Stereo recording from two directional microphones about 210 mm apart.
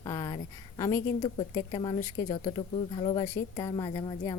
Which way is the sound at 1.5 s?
25° left (ahead or behind).